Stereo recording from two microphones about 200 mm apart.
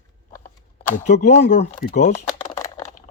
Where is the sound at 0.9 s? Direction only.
40° left (ahead or behind).